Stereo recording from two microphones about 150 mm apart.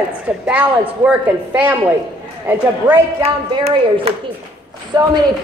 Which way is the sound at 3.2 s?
45° right (ahead or behind).